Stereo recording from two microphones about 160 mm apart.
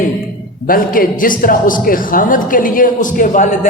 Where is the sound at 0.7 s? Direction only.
65° left (ahead or behind).